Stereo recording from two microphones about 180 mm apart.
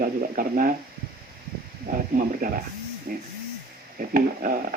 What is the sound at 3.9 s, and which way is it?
Speech, 50° right (ahead or behind).